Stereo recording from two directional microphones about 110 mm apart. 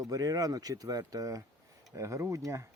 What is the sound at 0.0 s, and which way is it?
Speech, 30° right (ahead or behind).